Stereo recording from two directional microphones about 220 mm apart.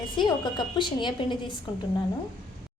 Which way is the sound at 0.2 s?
20° left (ahead or behind).